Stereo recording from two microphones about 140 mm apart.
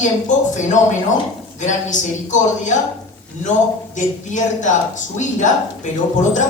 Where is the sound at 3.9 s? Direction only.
60° left (ahead or behind).